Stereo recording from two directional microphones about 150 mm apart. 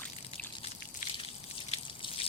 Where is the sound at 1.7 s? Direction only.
40° left (ahead or behind).